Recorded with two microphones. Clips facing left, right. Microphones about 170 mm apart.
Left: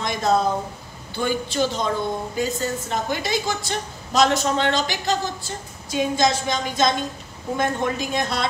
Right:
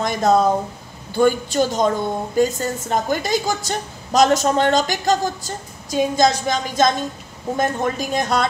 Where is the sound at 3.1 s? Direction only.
45° right (ahead or behind).